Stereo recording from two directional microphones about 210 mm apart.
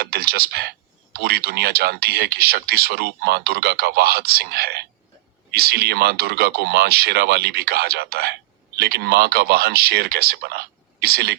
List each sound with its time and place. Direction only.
0.0 s speech: 50° right (ahead or behind)